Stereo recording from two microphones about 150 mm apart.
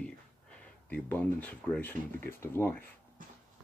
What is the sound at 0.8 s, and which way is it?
Speech, 10° left (ahead or behind).